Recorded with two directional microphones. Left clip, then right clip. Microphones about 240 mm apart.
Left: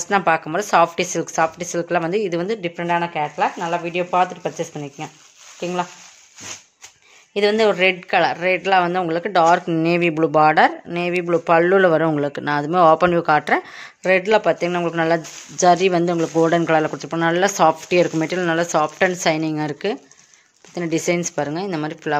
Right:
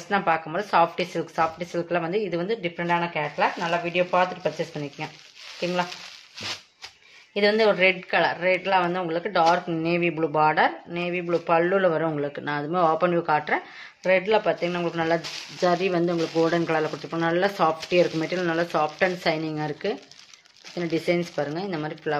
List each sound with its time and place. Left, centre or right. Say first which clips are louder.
0.1 s a woman's voice: left 6 dB; left
7.3 s a woman's voice: left 4 dB; left